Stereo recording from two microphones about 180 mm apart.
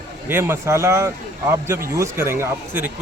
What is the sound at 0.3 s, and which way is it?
Speech, 15° right (ahead or behind).